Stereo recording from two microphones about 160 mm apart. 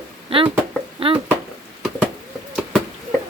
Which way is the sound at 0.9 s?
35° right (ahead or behind).